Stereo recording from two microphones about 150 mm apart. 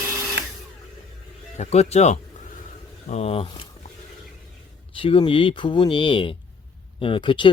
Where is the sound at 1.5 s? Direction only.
45° left (ahead or behind).